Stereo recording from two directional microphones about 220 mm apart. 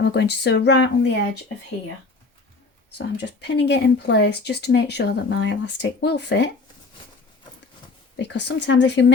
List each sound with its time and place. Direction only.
0.0 s speech: 50° left (ahead or behind)
3.0 s speech: 50° left (ahead or behind)
8.1 s speech: 50° left (ahead or behind)